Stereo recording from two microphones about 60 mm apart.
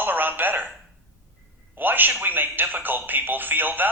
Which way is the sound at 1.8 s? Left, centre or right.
Right.